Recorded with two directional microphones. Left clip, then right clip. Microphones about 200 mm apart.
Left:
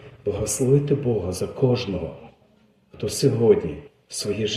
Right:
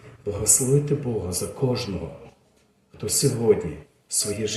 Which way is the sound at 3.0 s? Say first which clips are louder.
Left 2 dB; 20° left (ahead or behind).